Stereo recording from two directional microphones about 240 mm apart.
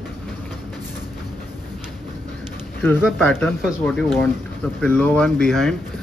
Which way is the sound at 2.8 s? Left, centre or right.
Centre.